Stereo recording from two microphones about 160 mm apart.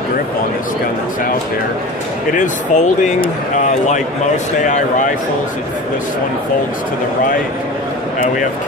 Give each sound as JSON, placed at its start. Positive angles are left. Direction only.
{"t": 2.3, "sound": "speech", "side_deg": 50}